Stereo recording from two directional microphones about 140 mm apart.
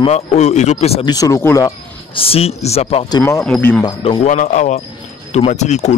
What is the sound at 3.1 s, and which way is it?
Speech, 25° left (ahead or behind).